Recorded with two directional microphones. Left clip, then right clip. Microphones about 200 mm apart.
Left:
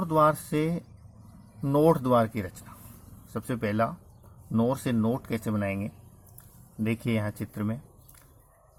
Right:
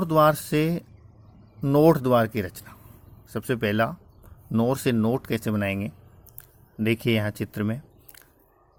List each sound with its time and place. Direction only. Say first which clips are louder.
0.0 s speech: right 3 dB; 30° right (ahead or behind)